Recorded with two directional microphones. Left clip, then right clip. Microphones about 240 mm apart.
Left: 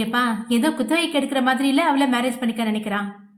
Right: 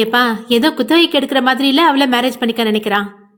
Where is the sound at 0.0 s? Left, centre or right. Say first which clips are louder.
Right 8 dB; right.